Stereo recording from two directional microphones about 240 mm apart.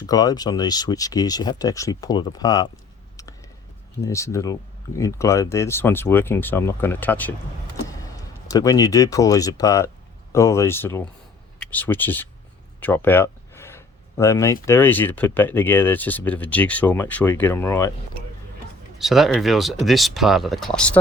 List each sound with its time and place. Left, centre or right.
0.0 s speech: centre
4.0 s speech: centre
8.4 s speech: centre
18.9 s speech: centre